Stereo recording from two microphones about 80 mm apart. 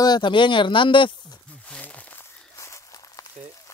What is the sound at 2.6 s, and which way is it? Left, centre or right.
Walk, left.